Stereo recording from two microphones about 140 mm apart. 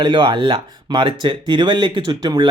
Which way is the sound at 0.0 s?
35° right (ahead or behind).